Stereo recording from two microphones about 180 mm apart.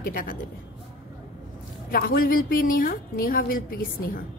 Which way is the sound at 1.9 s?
55° left (ahead or behind).